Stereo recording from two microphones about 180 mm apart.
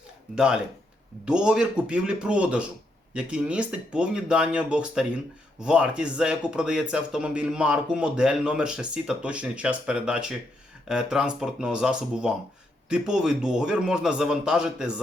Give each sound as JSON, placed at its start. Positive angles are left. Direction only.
{"t": 0.3, "sound": "speech", "side_deg": -5}